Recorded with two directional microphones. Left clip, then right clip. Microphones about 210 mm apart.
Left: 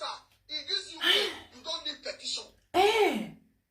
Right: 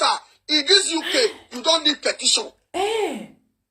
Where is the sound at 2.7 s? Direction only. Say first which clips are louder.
Right 1 dB; 5° right (ahead or behind).